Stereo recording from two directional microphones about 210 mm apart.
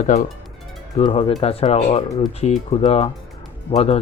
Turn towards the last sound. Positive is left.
turn(degrees=30)  # may be behind; listen again after turning